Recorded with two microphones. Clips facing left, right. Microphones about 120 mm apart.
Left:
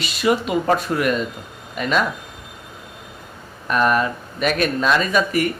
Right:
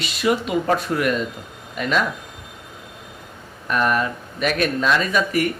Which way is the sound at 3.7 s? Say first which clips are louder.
Left 2 dB; 35° left (ahead or behind).